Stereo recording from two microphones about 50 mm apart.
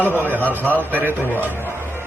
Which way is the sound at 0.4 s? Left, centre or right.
Left.